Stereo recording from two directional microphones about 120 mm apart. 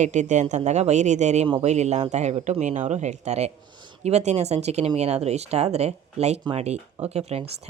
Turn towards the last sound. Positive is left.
turn(degrees=-60)  # may be behind; listen again after turning